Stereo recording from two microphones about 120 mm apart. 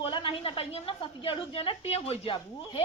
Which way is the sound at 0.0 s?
45° left (ahead or behind).